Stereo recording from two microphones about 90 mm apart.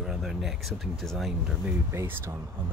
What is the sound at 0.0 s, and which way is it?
Speech, 5° right (ahead or behind).